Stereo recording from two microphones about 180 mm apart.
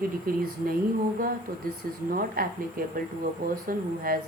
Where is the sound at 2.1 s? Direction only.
55° right (ahead or behind).